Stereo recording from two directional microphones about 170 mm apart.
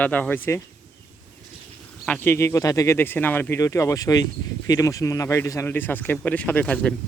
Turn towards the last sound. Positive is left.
turn(degrees=10)  # may be behind; listen again after turning